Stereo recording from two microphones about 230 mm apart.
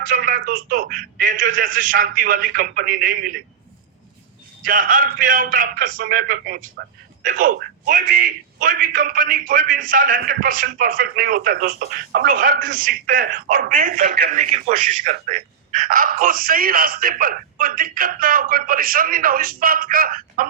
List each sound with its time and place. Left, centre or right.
0.1 s a man's voice: right
4.6 s a man's voice: right